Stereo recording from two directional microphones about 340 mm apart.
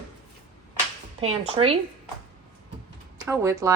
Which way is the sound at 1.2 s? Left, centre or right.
Centre.